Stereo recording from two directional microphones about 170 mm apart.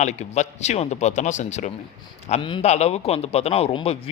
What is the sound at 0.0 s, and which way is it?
Speech, 40° left (ahead or behind).